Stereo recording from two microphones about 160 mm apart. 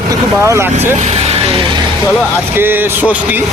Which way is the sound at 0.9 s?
45° right (ahead or behind).